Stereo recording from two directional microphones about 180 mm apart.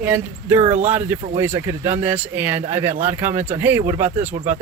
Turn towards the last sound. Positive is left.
turn(degrees=-10)  # may be behind; listen again after turning